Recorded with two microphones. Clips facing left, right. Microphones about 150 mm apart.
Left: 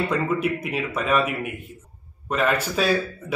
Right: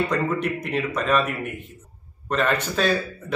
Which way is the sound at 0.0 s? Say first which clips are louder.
Even; 5° left (ahead or behind).